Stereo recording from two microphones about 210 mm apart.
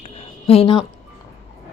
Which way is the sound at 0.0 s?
30° left (ahead or behind).